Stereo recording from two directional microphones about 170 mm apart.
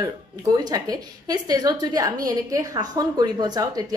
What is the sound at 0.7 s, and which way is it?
A woman's voice, 20° right (ahead or behind).